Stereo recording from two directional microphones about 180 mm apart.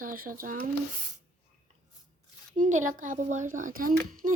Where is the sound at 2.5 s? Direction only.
45° right (ahead or behind).